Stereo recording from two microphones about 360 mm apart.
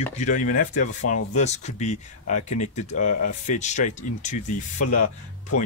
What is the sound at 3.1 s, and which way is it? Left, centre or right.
Speech, left.